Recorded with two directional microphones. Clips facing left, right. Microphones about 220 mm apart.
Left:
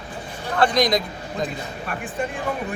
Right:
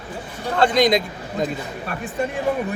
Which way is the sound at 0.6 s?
25° right (ahead or behind).